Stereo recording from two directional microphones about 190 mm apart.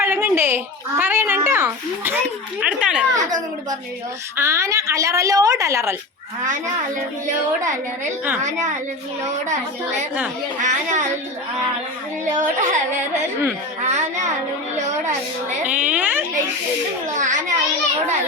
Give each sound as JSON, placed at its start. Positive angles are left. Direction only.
{"t": 0.0, "sound": "a woman's voice", "side_deg": -15}
{"t": 3.2, "sound": "a woman's voice", "side_deg": -20}
{"t": 10.6, "sound": "speech", "side_deg": -40}
{"t": 12.2, "sound": "speech", "side_deg": -40}
{"t": 13.8, "sound": "speech", "side_deg": -35}
{"t": 15.6, "sound": "a woman's voice", "side_deg": -10}
{"t": 17.2, "sound": "speech", "side_deg": -40}